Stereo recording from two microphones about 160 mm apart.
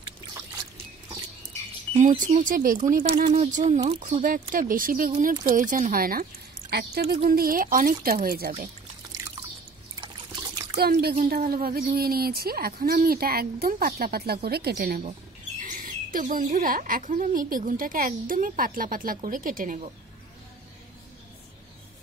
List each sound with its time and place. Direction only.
2.0 s speech: 55° right (ahead or behind)
6.7 s speech: 80° right
7.2 s speech: 65° right (ahead or behind)
10.8 s a woman's voice: 80° right
15.6 s speech: 55° right (ahead or behind)